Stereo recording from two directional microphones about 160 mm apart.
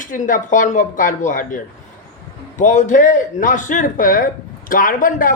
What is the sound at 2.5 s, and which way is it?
A man's voice, 50° left (ahead or behind).